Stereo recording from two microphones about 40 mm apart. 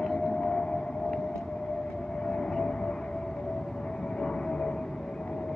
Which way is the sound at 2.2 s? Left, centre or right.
Centre.